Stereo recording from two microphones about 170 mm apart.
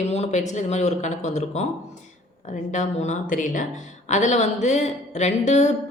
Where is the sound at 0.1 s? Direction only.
40° left (ahead or behind).